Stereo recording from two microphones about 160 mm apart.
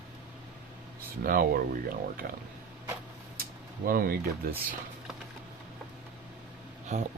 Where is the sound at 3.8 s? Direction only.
65° right (ahead or behind).